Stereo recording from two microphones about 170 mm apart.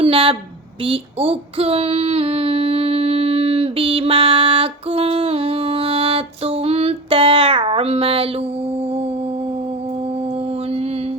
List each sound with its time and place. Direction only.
0.0 s a woman's voice: 35° right (ahead or behind)
0.9 s child singing: 35° right (ahead or behind)